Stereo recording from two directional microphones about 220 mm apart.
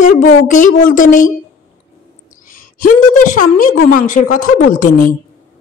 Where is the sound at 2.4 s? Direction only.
40° left (ahead or behind).